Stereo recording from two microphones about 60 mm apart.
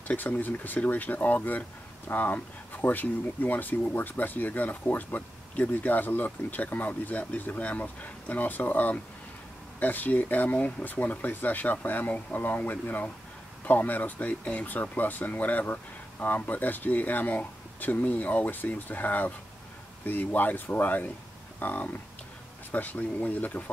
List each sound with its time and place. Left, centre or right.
0.1 s speech: left